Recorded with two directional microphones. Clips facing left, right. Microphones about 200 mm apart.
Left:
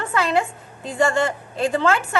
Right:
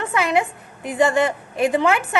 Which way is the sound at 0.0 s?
20° right (ahead or behind).